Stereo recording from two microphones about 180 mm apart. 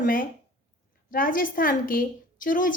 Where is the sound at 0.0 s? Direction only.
50° left (ahead or behind).